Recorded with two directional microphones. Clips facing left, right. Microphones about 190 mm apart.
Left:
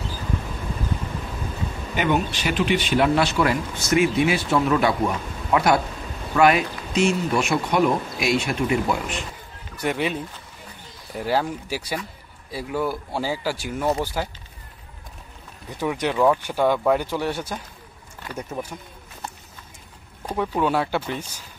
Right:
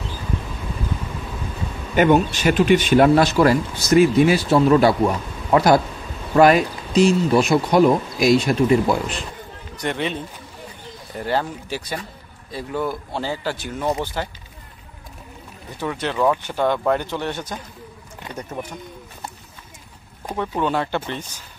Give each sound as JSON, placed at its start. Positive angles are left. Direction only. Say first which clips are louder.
{"t": 2.0, "sound": "speech", "louder": "right 7 dB", "side_deg": -45}
{"t": 9.8, "sound": "speech", "louder": "even", "side_deg": 5}
{"t": 15.8, "sound": "speech", "louder": "left 1 dB", "side_deg": 10}
{"t": 20.3, "sound": "speech", "louder": "even", "side_deg": 5}